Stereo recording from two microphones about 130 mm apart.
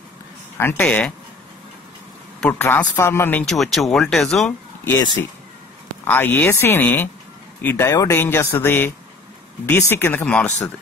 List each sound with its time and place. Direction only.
0.6 s speech: 15° left (ahead or behind)
2.8 s speech: 20° left (ahead or behind)
3.4 s speech: centre (ahead or behind)
6.0 s speech: 15° left (ahead or behind)